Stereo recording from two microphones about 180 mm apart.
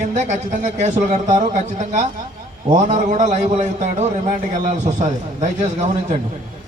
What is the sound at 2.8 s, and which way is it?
A man's voice, 40° right (ahead or behind).